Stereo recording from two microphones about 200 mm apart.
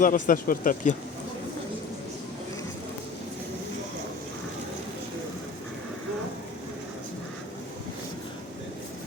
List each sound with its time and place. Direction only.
0.0 s speech: 40° left (ahead or behind)